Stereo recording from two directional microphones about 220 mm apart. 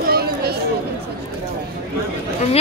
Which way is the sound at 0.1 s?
45° right (ahead or behind).